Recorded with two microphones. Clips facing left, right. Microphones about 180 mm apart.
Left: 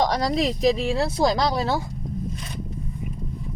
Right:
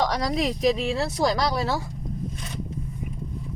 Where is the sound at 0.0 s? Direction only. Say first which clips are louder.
Left 2 dB; 30° left (ahead or behind).